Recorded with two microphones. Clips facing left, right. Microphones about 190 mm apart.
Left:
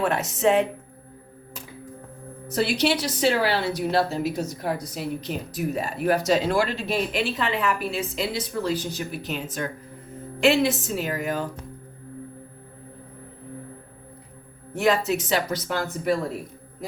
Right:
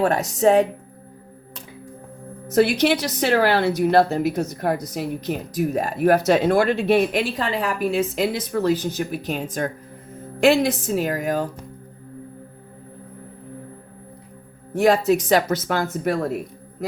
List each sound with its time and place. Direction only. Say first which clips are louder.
0.0 s a woman's voice: right 4 dB; 40° right (ahead or behind)
2.8 s a woman's voice: right 2 dB; 55° right (ahead or behind)
4.9 s speech: right 4 dB; 45° right (ahead or behind)
9.0 s a woman's voice: right 5 dB; 40° right (ahead or behind)
14.7 s speech: right 5 dB; 40° right (ahead or behind)